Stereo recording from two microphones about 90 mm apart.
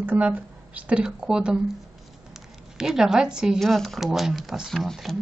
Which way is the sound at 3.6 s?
5° left (ahead or behind).